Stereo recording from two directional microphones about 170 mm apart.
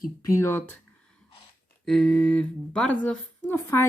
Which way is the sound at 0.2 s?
15° left (ahead or behind).